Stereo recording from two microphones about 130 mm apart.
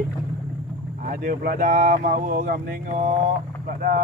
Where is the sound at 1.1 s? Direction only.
90° right; by 3.2 s 70° right (ahead or behind).